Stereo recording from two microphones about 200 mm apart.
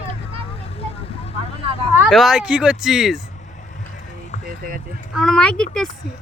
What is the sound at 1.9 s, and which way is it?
Speech, centre (ahead or behind).